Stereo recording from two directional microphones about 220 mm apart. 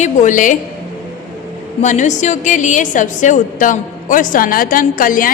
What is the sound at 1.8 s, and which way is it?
A woman's voice, 35° left (ahead or behind).